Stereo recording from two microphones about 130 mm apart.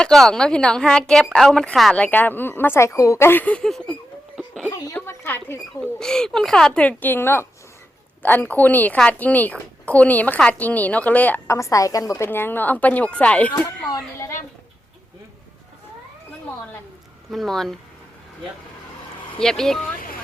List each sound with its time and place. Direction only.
0.0 s a woman's voice: 5° left (ahead or behind)
2.0 s a woman's voice: 15° left (ahead or behind)
4.4 s a sound: 5° left (ahead or behind)
4.9 s a sound: 15° left (ahead or behind)
6.0 s a woman's voice: 5° left (ahead or behind)
11.5 s a woman's voice: 25° left (ahead or behind)
13.9 s speech: 25° left (ahead or behind)
17.3 s a woman's voice: centre (ahead or behind)
19.4 s a woman's voice: 5° left (ahead or behind)
20.0 s a sound: 90° left